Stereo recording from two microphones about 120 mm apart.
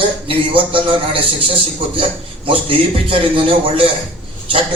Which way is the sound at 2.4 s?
50° right (ahead or behind).